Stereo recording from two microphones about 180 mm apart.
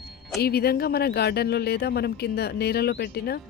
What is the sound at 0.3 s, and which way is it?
Speech, 60° left (ahead or behind).